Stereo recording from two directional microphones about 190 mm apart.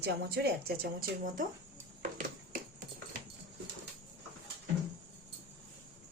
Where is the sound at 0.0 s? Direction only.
60° right (ahead or behind).